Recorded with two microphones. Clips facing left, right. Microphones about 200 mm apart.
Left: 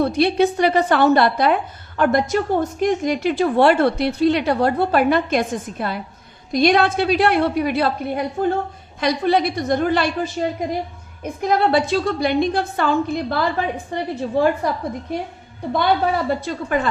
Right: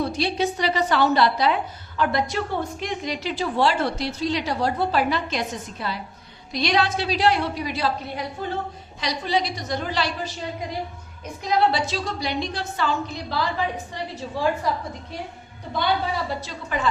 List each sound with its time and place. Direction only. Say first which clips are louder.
0.0 s a woman's voice: left 7 dB; 55° left (ahead or behind)
15.7 s a woman's voice: left 6 dB; 55° left (ahead or behind)